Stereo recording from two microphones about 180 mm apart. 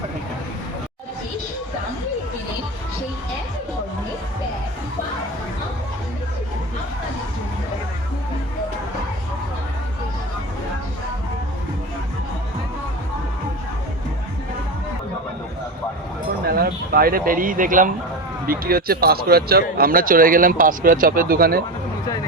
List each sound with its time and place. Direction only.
16.5 s speech: 60° right (ahead or behind)